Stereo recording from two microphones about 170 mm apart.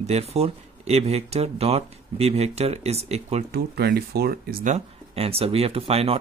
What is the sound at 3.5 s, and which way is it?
Speech, 65° right (ahead or behind).